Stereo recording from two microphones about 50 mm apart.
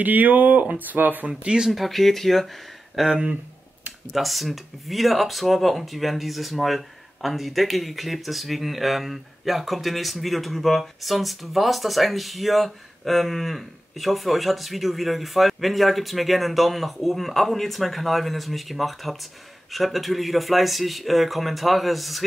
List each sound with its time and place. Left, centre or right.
0.0 s speech: right
1.3 s speech: centre
1.7 s speech: centre